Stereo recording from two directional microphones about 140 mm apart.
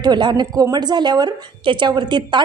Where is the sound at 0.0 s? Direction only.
30° right (ahead or behind).